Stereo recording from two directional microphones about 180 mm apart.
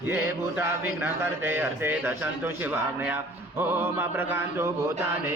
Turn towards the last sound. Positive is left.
turn(degrees=-15)  # may be behind; listen again after turning